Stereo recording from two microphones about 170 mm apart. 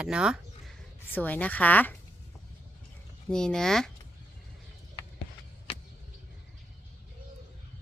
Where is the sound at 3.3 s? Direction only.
5° left (ahead or behind).